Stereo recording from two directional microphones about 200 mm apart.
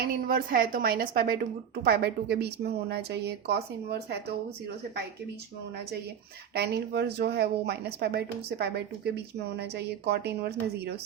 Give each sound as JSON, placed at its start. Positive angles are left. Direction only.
{"t": 0.0, "sound": "a woman's voice", "side_deg": -45}
{"t": 6.5, "sound": "a woman's voice", "side_deg": -55}